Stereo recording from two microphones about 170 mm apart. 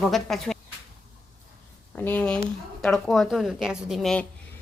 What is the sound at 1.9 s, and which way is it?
Speech, 10° left (ahead or behind).